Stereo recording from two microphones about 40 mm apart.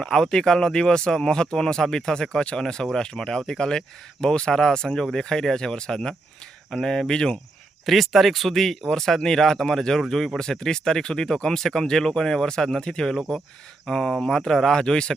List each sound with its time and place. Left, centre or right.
0.0 s speech: centre
7.9 s speech: centre
14.1 s speech: centre